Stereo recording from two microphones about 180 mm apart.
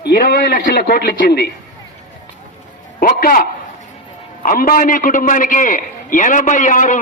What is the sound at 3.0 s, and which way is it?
Speech, 55° left (ahead or behind).